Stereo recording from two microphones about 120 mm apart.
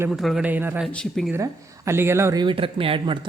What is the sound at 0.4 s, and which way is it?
Speech, 15° right (ahead or behind).